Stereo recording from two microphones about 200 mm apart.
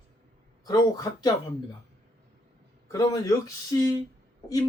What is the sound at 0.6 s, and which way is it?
Speech, 20° left (ahead or behind).